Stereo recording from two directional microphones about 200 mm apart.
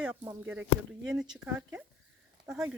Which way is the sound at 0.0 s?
10° right (ahead or behind).